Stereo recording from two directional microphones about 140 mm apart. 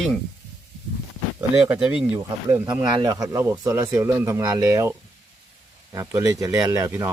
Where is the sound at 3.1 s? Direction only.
20° right (ahead or behind).